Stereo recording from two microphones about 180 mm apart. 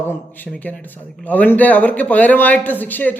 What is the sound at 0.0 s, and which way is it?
A man's voice, 10° left (ahead or behind).